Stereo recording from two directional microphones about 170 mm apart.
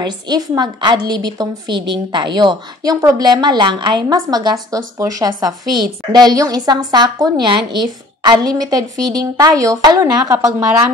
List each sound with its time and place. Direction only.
0.0 s a woman's voice: 25° right (ahead or behind)